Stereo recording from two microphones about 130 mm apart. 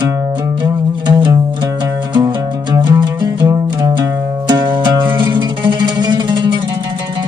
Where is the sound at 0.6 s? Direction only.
35° right (ahead or behind).